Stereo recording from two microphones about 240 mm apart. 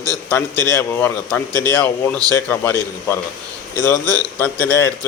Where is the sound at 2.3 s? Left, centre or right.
Centre.